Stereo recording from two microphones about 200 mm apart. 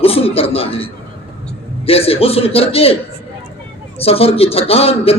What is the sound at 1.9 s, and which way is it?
A man's voice, 30° left (ahead or behind).